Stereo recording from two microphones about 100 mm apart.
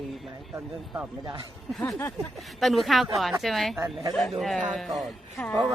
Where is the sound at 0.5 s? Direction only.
15° right (ahead or behind).